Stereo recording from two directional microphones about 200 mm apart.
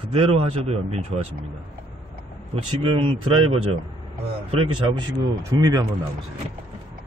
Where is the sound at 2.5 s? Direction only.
25° right (ahead or behind).